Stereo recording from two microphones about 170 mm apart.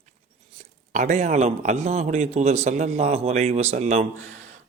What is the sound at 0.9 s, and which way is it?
A man's voice, 45° right (ahead or behind).